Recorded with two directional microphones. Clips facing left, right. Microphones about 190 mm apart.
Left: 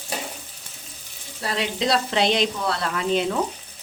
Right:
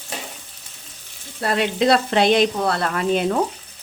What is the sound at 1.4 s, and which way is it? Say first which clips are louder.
Speech: right 6 dB; 55° right (ahead or behind).